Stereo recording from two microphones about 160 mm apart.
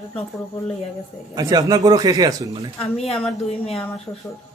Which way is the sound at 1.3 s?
25° right (ahead or behind).